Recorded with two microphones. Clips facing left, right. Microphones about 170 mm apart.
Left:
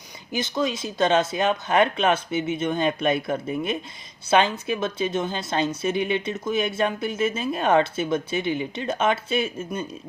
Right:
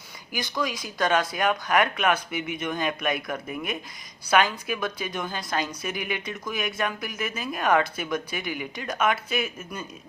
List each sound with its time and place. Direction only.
0.3 s a woman's voice: 25° left (ahead or behind)